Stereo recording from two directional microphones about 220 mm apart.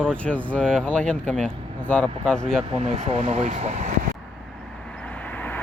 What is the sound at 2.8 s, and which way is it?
Speech, 30° right (ahead or behind).